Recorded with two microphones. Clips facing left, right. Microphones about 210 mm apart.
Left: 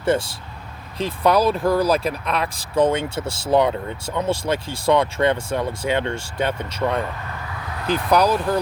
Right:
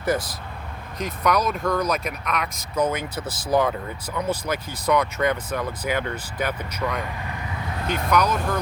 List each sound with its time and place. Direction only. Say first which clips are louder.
0.0 s speech: left 4 dB; 25° left (ahead or behind)